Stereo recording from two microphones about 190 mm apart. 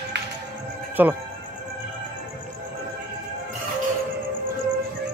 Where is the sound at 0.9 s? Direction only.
10° right (ahead or behind).